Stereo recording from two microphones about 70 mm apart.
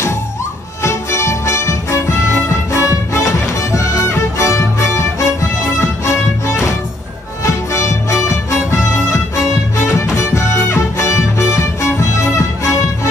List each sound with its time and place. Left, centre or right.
0.8 s music: left